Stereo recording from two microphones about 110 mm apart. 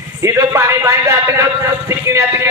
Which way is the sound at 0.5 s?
25° right (ahead or behind).